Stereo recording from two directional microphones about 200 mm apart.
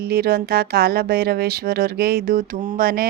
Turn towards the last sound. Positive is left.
turn(degrees=-45)  # may be behind; listen again after turning